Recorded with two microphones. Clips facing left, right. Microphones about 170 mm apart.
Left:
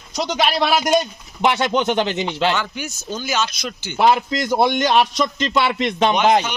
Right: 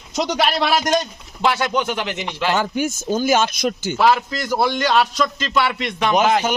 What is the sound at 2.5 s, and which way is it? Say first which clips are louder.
Speech: right 3 dB; 45° right (ahead or behind).